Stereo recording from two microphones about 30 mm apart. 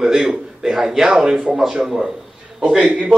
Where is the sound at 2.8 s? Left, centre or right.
Right.